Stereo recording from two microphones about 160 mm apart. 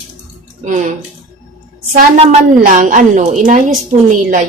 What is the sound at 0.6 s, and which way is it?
Speech, 50° right (ahead or behind).